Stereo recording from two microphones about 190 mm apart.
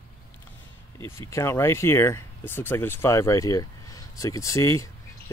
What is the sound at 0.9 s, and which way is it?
Speech, 15° left (ahead or behind).